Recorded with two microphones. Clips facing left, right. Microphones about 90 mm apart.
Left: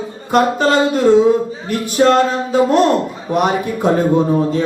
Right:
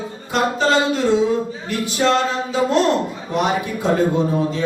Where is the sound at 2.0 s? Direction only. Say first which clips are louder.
Left 6 dB; 40° left (ahead or behind).